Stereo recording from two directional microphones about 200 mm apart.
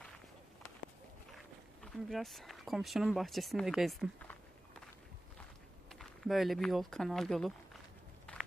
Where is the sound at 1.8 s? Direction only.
Centre (ahead or behind).